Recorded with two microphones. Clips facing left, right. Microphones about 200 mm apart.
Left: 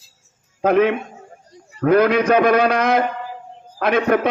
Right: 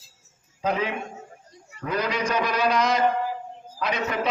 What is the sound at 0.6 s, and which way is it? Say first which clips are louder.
A man's voice: left 10 dB; 60° left (ahead or behind).